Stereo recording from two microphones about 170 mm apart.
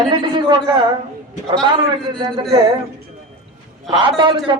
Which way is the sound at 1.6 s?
25° right (ahead or behind).